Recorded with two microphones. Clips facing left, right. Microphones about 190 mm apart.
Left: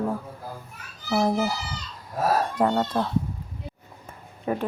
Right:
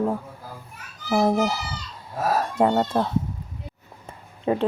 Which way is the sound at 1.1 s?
15° right (ahead or behind).